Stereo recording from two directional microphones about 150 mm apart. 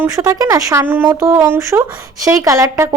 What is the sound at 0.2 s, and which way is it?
A woman's voice, 20° right (ahead or behind).